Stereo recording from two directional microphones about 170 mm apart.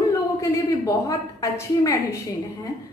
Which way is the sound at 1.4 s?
20° left (ahead or behind).